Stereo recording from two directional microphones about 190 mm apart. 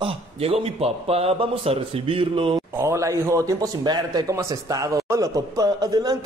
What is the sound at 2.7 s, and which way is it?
A man's voice, 15° right (ahead or behind).